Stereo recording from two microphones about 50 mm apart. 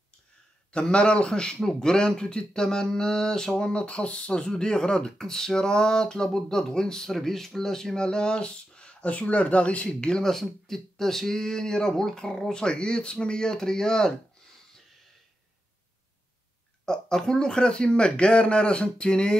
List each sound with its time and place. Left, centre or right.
0.7 s speech: centre
10.3 s speech: centre
16.8 s speech: centre